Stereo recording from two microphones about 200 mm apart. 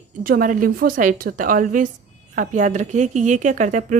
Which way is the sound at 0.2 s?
45° right (ahead or behind).